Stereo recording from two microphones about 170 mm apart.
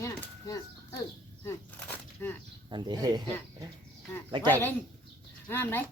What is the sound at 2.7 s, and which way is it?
Speech, 25° right (ahead or behind).